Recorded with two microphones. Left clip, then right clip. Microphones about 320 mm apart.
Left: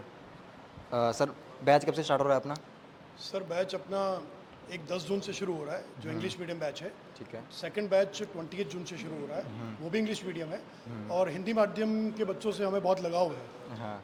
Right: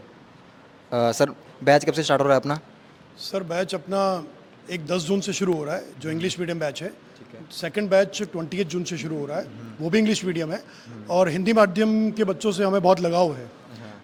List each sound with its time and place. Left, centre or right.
0.9 s a man's voice: centre
3.2 s speech: right
4.6 s speech: right